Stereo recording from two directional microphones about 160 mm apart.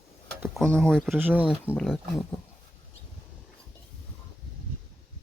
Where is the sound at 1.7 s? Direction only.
5° left (ahead or behind).